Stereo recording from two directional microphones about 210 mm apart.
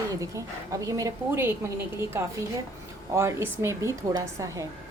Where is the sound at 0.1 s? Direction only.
15° right (ahead or behind).